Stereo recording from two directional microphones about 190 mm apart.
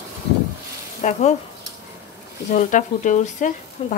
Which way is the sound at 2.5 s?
45° left (ahead or behind).